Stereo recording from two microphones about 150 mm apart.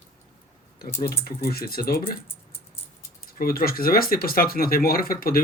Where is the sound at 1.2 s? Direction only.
90° left.